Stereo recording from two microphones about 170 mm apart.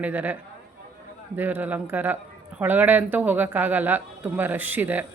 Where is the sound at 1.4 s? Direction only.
10° right (ahead or behind).